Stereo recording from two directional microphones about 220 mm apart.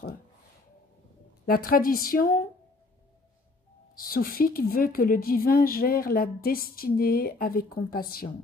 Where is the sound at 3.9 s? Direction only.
40° left (ahead or behind).